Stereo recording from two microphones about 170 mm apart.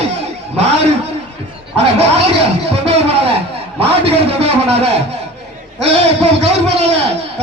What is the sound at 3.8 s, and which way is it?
A man's voice, 35° right (ahead or behind).